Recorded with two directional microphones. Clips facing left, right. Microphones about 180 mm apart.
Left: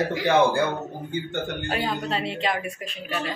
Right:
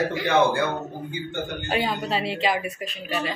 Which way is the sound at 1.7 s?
5° right (ahead or behind).